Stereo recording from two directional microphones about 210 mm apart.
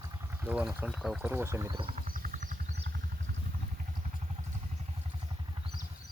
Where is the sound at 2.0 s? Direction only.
40° right (ahead or behind).